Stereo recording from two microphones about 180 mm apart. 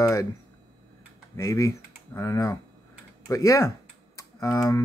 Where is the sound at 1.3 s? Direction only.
15° left (ahead or behind).